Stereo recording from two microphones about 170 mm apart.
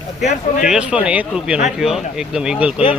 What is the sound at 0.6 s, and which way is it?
Speech, 5° right (ahead or behind).